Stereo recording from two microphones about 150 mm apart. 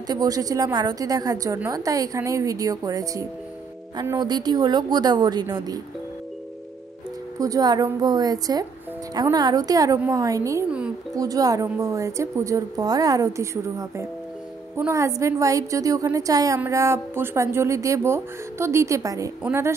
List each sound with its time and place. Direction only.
0.0 s a woman's voice: 25° right (ahead or behind)
7.3 s a woman's voice: 25° right (ahead or behind)